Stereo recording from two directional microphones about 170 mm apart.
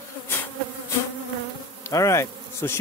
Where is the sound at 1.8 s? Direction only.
20° left (ahead or behind).